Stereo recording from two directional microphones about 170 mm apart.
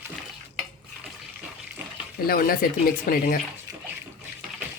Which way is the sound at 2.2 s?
60° left (ahead or behind).